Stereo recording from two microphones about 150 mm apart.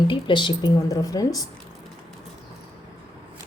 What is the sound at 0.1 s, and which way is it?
A woman's voice, 30° left (ahead or behind).